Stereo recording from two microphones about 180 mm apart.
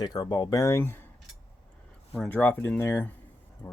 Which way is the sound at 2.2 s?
10° left (ahead or behind).